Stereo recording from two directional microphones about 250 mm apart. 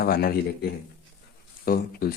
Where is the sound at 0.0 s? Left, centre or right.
Left.